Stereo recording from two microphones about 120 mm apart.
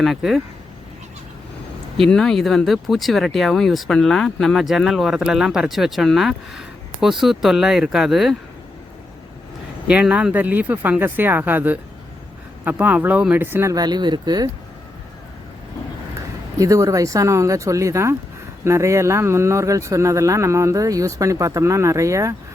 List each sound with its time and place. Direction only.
0.0 s speech: centre (ahead or behind)
2.0 s speech: 5° left (ahead or behind)
9.8 s speech: 10° right (ahead or behind)
13.7 s speech: 35° right (ahead or behind)
16.6 s speech: 25° right (ahead or behind)